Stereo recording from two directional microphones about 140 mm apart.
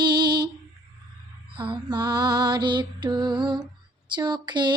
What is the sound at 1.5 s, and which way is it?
Female singing, 35° right (ahead or behind).